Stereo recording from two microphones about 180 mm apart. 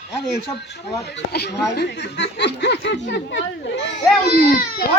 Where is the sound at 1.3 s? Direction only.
65° left (ahead or behind); by 4.0 s 80° left.